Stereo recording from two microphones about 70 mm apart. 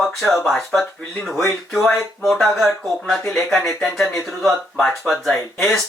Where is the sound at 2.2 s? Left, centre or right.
Centre.